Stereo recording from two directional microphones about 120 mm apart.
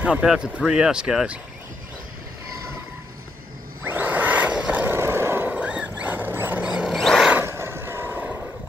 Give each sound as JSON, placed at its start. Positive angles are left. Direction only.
{"t": 0.0, "sound": "speech", "side_deg": -10}
{"t": 3.8, "sound": "a sound", "side_deg": -15}
{"t": 7.3, "sound": "vehicle", "side_deg": -20}